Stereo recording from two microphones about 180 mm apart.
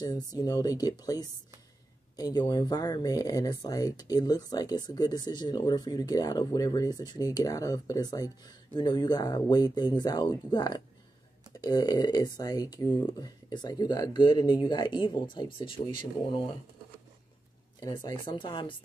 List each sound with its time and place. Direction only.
0.3 s speech: 20° left (ahead or behind)
17.7 s speech: 20° left (ahead or behind)